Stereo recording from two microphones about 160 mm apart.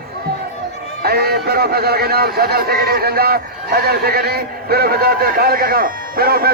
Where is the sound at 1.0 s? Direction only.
75° right (ahead or behind).